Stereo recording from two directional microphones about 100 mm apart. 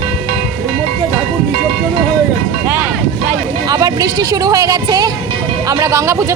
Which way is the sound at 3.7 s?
40° right (ahead or behind).